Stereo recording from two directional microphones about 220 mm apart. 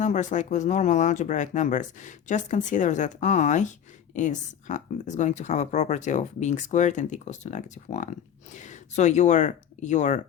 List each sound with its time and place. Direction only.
0.0 s speech: 35° left (ahead or behind)